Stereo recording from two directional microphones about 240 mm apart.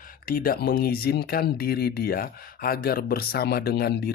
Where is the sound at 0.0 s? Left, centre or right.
Left.